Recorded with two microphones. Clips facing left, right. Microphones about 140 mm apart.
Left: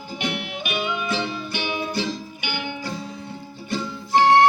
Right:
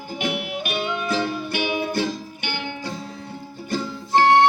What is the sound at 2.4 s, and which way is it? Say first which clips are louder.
Music: even; 10° left (ahead or behind).